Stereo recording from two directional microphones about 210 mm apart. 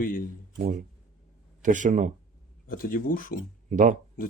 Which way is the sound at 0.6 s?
40° right (ahead or behind).